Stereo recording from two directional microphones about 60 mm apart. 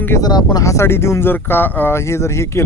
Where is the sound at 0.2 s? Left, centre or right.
Left.